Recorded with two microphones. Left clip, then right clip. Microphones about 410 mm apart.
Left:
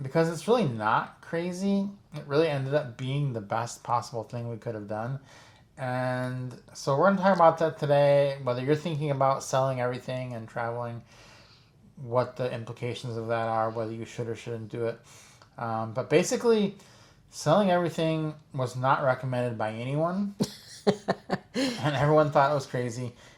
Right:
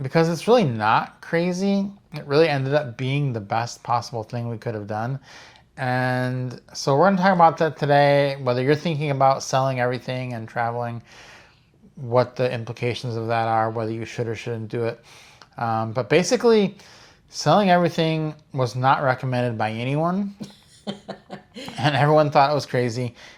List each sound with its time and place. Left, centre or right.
0.0 s speech: right
12.1 s speech: right
20.4 s a sound: left
21.8 s speech: right